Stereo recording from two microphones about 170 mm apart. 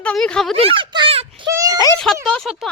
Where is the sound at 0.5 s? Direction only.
35° right (ahead or behind).